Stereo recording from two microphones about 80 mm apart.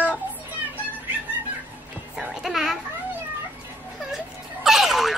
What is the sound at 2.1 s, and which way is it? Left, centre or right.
Music, centre.